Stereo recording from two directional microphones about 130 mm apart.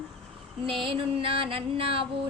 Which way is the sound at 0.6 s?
45° right (ahead or behind).